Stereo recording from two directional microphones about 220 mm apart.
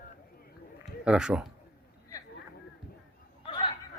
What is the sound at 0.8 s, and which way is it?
Speech, 5° right (ahead or behind).